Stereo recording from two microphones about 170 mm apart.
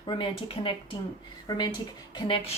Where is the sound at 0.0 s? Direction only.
30° left (ahead or behind).